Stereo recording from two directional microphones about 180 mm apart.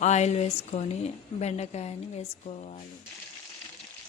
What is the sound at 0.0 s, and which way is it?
A woman's voice, 40° left (ahead or behind).